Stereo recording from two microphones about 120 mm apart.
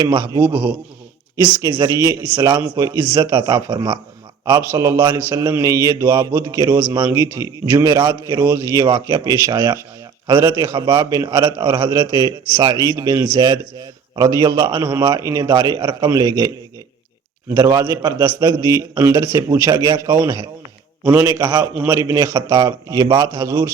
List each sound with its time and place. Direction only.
0.1 s a man's voice: 35° right (ahead or behind)
2.0 s a man's voice: 25° right (ahead or behind)
7.1 s a man's voice: 25° right (ahead or behind)
17.5 s a man's voice: 30° right (ahead or behind)
21.1 s a man's voice: 20° right (ahead or behind)